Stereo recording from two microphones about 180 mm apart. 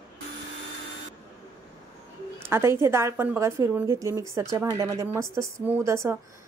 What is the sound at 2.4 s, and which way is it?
A woman's voice, 15° right (ahead or behind).